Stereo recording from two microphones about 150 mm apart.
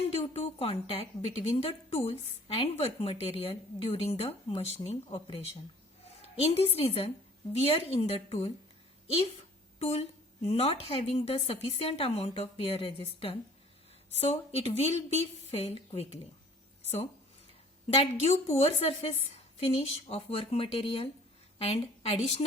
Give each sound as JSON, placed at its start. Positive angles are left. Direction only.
{"t": 0.1, "sound": "a woman's voice", "side_deg": 45}
{"t": 9.7, "sound": "a woman's voice", "side_deg": 45}
{"t": 17.9, "sound": "a woman's voice", "side_deg": 45}